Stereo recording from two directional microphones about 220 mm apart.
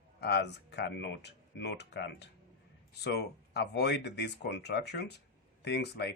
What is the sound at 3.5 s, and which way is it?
Speech, 50° left (ahead or behind).